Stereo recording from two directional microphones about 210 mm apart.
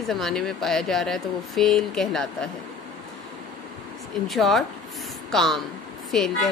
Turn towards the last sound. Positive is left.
turn(degrees=0)  # may be behind; listen again after turning